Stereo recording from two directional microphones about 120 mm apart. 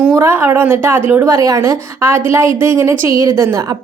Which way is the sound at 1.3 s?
30° right (ahead or behind).